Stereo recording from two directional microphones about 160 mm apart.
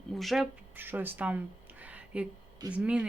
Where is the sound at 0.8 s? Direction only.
10° right (ahead or behind).